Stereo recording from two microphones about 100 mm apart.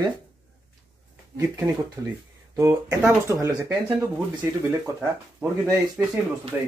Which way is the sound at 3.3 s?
30° right (ahead or behind).